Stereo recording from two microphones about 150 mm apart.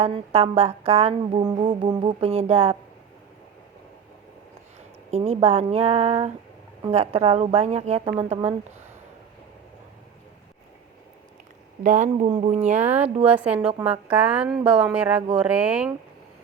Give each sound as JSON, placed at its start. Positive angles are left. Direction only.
{"t": 0.0, "sound": "speech", "side_deg": -45}
{"t": 1.4, "sound": "music", "side_deg": -30}
{"t": 5.1, "sound": "speech", "side_deg": -40}
{"t": 11.8, "sound": "speech", "side_deg": -55}
{"t": 12.8, "sound": "speech", "side_deg": -10}